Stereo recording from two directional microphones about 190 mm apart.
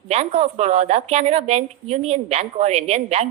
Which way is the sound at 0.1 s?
35° right (ahead or behind).